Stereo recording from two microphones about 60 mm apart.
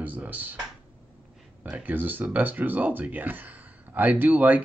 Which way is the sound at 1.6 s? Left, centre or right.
Right.